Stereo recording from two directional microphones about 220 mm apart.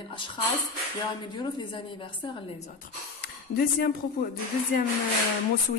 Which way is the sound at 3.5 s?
40° left (ahead or behind).